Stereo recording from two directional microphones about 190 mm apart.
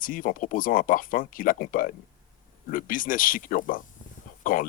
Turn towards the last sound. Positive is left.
turn(degrees=45)  # may be behind; listen again after turning